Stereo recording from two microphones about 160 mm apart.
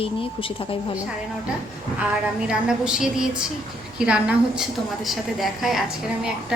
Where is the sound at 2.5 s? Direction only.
5° right (ahead or behind).